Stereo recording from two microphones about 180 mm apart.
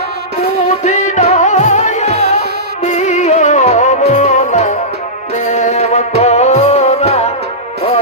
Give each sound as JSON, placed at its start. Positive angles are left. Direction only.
{"t": 0.8, "sound": "music", "side_deg": 40}